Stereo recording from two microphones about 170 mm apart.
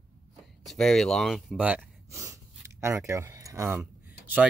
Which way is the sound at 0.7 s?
Centre (ahead or behind).